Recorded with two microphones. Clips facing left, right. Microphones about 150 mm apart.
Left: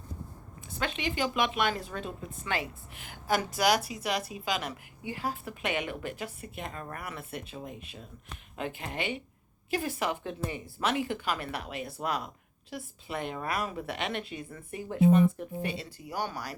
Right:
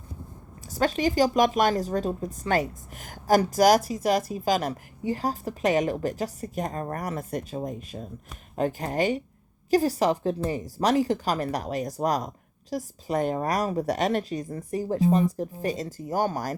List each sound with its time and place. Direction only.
0.7 s a woman's voice: 40° right (ahead or behind)